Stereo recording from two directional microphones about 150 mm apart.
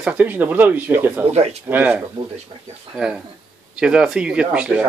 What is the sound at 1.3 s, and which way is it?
Speech, 45° right (ahead or behind).